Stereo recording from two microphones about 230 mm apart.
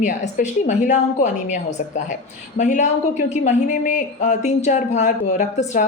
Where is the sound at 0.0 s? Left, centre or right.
Left.